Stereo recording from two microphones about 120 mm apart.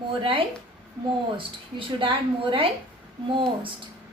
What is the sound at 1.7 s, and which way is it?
Speech, 45° right (ahead or behind).